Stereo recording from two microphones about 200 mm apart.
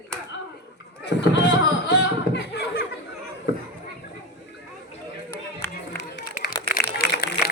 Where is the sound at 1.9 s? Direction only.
60° left (ahead or behind).